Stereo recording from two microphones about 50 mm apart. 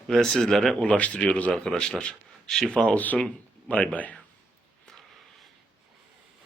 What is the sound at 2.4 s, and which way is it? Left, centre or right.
Speech, centre.